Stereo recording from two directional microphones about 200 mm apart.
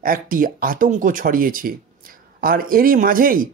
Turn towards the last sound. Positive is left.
turn(degrees=-45)  # may be behind; listen again after turning